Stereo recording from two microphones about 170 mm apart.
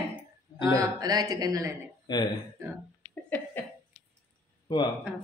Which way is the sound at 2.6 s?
15° right (ahead or behind).